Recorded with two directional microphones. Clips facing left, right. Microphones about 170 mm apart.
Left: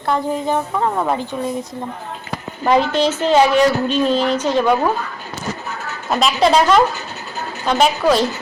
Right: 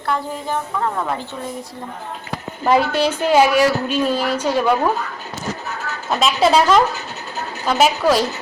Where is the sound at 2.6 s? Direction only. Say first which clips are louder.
Left 1 dB; 5° right (ahead or behind).